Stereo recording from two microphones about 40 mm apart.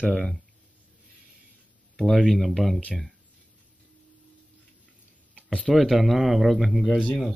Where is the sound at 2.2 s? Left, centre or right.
Centre.